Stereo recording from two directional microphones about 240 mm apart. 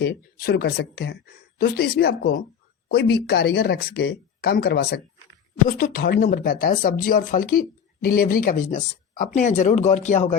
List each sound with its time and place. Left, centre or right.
0.0 s speech: left